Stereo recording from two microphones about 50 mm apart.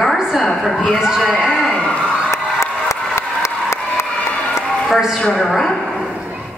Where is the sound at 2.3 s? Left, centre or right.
Left.